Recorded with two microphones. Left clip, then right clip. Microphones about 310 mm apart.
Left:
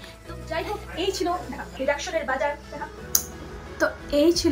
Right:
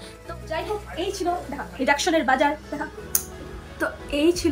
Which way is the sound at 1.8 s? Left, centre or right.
Right.